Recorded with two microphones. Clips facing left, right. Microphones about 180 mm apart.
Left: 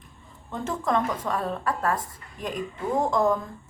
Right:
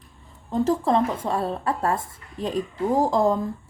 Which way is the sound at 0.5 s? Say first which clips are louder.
Right 6 dB; 35° right (ahead or behind).